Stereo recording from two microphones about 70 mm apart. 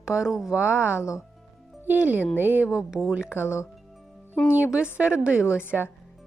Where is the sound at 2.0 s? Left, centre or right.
Right.